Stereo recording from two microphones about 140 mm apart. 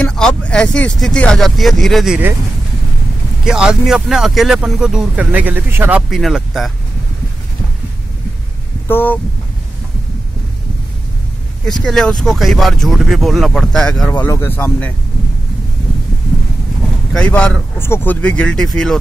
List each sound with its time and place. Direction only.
0.0 s speech: 5° left (ahead or behind)
3.4 s speech: 5° right (ahead or behind)
8.8 s speech: 15° left (ahead or behind)
11.6 s speech: 5° left (ahead or behind)
14.2 s speech: 20° left (ahead or behind)
17.1 s speech: 5° left (ahead or behind)